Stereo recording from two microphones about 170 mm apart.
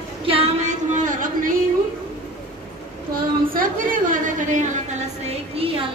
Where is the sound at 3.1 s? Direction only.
55° right (ahead or behind).